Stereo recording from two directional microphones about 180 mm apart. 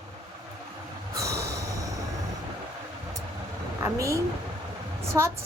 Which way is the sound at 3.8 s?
15° right (ahead or behind).